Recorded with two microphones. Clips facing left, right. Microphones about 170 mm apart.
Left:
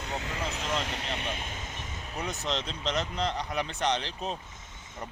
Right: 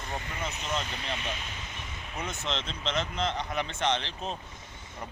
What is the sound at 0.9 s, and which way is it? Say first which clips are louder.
Speech: left 1 dB; 75° left (ahead or behind).